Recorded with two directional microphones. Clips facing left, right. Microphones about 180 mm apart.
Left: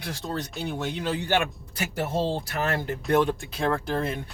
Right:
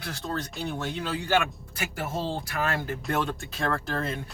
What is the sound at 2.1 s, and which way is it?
Speech, 20° left (ahead or behind).